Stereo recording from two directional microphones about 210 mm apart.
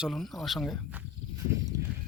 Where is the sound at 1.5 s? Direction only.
15° right (ahead or behind).